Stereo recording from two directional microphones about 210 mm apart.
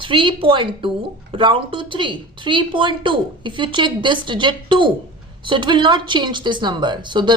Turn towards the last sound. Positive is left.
turn(degrees=-20)  # may be behind; listen again after turning